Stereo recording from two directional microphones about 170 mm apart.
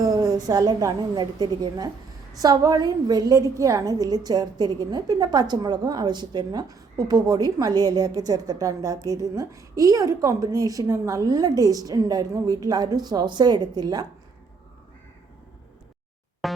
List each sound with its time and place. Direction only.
0.0 s a woman's voice: 20° right (ahead or behind)
16.4 s music: centre (ahead or behind)